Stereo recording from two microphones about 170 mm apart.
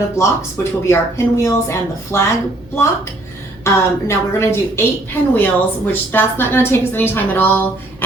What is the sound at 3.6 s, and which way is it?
Speech, 15° left (ahead or behind).